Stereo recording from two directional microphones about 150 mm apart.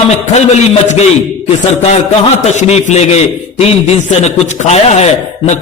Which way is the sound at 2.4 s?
45° left (ahead or behind).